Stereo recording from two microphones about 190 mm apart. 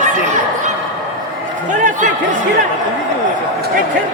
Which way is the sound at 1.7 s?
40° right (ahead or behind).